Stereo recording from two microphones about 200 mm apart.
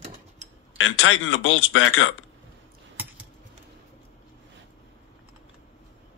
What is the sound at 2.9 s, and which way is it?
Typing, 10° right (ahead or behind).